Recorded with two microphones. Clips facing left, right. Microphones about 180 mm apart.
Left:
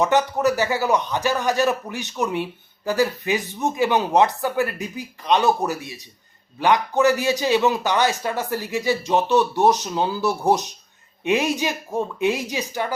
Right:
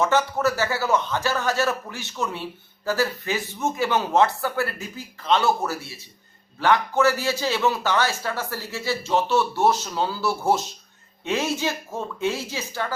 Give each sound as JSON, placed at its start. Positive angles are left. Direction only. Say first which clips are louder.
{"t": 0.0, "sound": "a man's voice", "louder": "left 2 dB", "side_deg": 15}